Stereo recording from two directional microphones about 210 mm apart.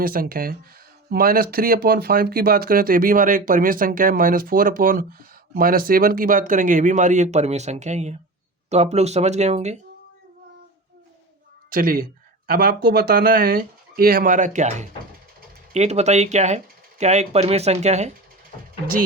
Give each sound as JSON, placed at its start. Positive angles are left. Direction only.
{"t": 0.0, "sound": "speech", "side_deg": -45}
{"t": 11.7, "sound": "speech", "side_deg": -40}